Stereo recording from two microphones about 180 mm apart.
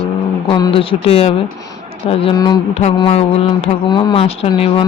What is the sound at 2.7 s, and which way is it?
Music, 35° left (ahead or behind).